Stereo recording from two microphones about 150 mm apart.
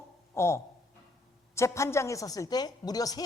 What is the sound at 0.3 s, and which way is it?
A woman's voice, 20° left (ahead or behind).